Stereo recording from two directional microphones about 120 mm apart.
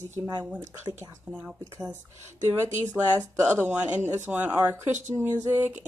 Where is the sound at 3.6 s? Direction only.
15° right (ahead or behind).